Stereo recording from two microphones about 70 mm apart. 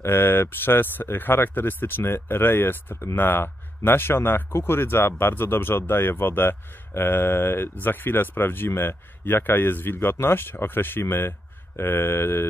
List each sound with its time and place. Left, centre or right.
0.0 s speech: left